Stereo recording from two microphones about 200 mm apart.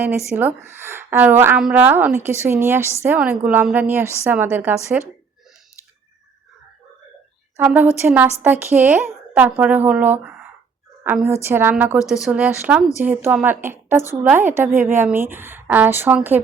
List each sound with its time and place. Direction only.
0.3 s a woman's voice: 10° right (ahead or behind)
7.5 s a woman's voice: 10° right (ahead or behind)